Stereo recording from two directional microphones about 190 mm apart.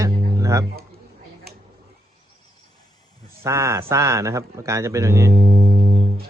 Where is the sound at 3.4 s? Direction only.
15° right (ahead or behind).